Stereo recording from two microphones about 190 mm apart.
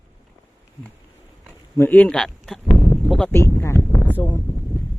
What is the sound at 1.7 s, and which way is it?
Speech, 10° left (ahead or behind).